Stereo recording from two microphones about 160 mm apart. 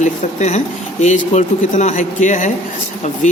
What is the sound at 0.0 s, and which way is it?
A man's voice, 45° left (ahead or behind).